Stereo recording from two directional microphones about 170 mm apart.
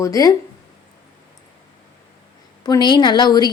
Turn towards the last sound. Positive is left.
turn(degrees=25)  # may be behind; listen again after turning